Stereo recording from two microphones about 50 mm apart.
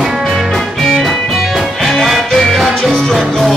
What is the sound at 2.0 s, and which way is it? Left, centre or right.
Music, centre.